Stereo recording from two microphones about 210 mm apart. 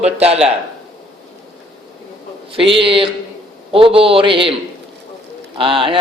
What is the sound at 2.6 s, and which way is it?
A man's voice, 25° right (ahead or behind).